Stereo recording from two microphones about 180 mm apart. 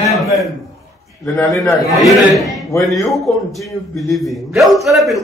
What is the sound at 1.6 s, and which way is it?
A man's voice, centre (ahead or behind).